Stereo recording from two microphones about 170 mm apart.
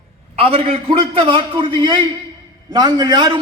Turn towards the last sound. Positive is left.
turn(degrees=-25)  # may be behind; listen again after turning